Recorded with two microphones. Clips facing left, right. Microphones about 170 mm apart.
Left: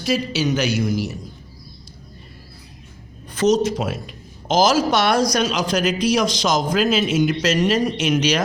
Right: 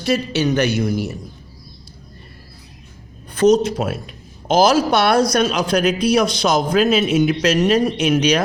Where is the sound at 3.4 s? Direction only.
55° right (ahead or behind).